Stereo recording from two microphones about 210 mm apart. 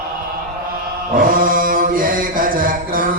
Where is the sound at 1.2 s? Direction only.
40° right (ahead or behind).